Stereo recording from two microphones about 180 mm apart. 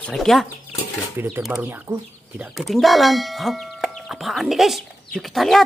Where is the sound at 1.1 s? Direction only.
10° right (ahead or behind).